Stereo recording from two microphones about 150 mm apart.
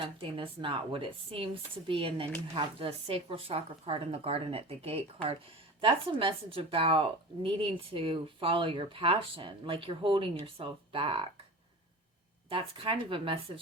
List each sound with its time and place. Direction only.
0.0 s a woman's voice: 35° right (ahead or behind)
12.5 s a woman's voice: 35° right (ahead or behind)